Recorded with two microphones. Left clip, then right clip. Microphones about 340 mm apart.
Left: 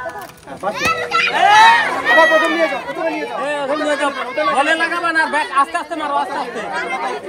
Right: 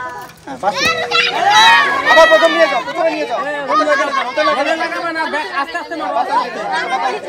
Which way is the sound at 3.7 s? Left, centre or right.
Centre.